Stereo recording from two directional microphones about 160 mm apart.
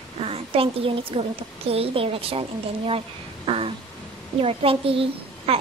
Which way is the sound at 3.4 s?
35° right (ahead or behind).